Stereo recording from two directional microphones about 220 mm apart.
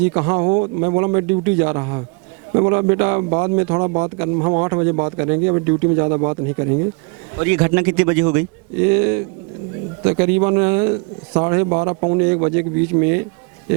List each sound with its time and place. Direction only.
0.0 s a man's voice: 15° right (ahead or behind)